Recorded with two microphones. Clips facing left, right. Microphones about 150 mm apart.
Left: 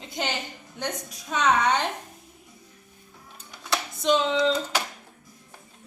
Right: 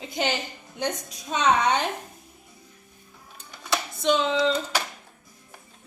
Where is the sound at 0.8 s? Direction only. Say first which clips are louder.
Right 3 dB; 20° right (ahead or behind).